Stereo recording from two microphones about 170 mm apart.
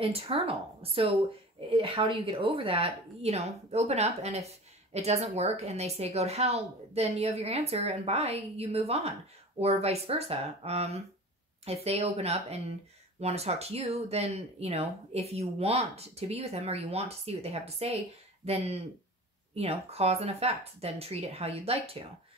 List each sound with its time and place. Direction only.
0.0 s a woman's voice: 35° right (ahead or behind)